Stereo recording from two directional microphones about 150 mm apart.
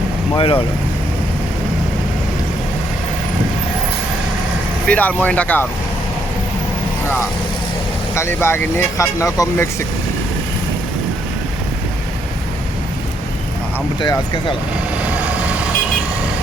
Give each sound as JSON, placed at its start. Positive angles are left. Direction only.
{"t": 0.3, "sound": "speech", "side_deg": 35}
{"t": 4.9, "sound": "speech", "side_deg": 10}
{"t": 8.1, "sound": "speech", "side_deg": 15}
{"t": 14.0, "sound": "speech", "side_deg": 30}